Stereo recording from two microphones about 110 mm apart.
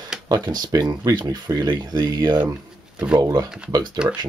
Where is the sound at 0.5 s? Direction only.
35° right (ahead or behind).